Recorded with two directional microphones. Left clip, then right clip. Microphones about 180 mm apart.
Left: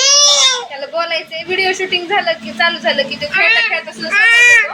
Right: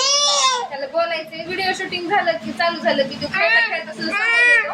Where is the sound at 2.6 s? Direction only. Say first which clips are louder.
Left 5 dB; centre (ahead or behind).